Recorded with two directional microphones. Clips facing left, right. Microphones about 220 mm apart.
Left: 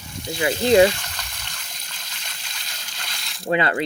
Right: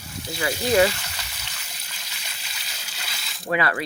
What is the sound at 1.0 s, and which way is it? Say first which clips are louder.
Water: left 1 dB; 5° right (ahead or behind).